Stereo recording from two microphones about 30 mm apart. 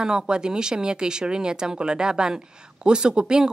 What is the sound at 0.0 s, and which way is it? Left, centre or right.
Speech, right.